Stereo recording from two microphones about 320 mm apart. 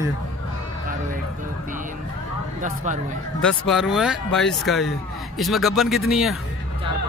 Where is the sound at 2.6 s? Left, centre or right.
Right.